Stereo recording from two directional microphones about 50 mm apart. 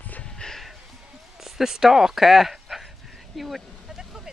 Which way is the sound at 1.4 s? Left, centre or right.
Centre.